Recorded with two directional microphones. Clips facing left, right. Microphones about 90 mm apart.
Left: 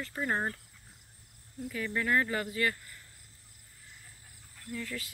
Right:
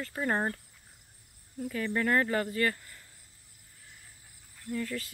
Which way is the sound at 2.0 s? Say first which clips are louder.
Right 2 dB; 40° right (ahead or behind).